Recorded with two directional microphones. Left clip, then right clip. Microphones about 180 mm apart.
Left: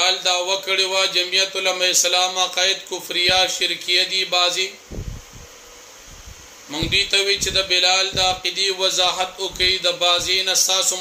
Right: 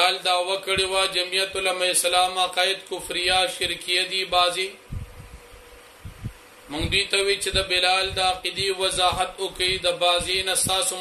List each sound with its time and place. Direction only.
0.0 s speech: 5° right (ahead or behind)
6.7 s a man's voice: 5° right (ahead or behind)